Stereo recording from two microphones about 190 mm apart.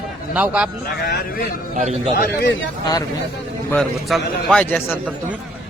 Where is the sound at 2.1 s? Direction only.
55° left (ahead or behind).